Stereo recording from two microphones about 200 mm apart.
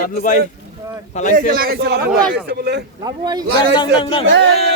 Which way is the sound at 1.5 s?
50° right (ahead or behind).